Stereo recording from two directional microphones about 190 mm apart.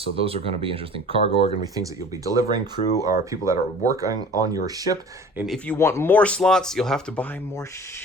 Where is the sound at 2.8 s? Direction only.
40° left (ahead or behind).